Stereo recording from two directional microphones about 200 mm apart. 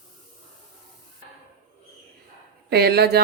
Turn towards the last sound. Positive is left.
turn(degrees=-55)  # may be behind; listen again after turning